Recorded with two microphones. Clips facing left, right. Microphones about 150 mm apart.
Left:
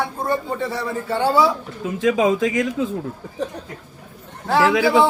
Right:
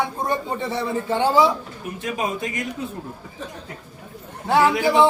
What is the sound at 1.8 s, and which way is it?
Speech, 90° left.